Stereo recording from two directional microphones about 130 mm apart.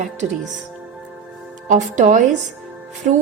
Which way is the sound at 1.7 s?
70° right (ahead or behind).